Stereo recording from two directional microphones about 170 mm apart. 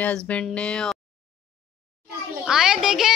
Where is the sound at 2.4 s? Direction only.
5° right (ahead or behind).